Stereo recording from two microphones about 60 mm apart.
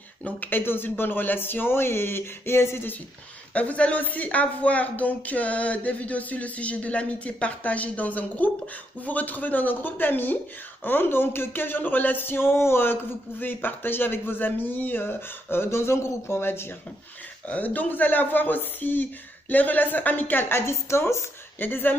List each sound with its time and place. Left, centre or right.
0.2 s speech: left
3.5 s speech: left
17.5 s speech: left
21.5 s speech: left